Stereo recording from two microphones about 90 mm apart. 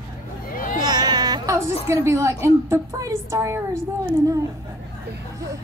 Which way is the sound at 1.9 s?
35° right (ahead or behind).